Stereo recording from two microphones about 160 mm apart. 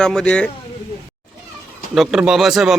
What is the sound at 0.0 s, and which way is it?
Speech, 5° left (ahead or behind).